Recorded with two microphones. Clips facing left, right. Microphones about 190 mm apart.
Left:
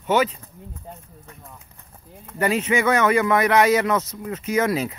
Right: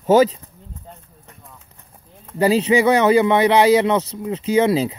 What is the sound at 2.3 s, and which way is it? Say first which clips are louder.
Speech: right 6 dB; 30° right (ahead or behind).